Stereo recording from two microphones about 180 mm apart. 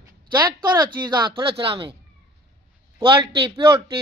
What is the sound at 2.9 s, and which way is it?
Speech, 30° right (ahead or behind).